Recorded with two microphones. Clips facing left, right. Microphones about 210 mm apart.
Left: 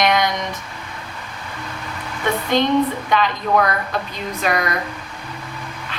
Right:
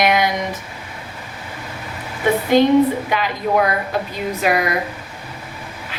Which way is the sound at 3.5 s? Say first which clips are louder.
Right 2 dB; 25° right (ahead or behind).